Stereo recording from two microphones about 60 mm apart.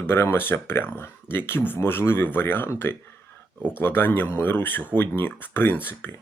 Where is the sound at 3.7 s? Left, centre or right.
Left.